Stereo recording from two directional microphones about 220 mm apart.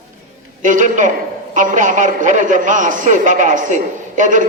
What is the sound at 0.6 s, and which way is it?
A man's voice, 35° right (ahead or behind).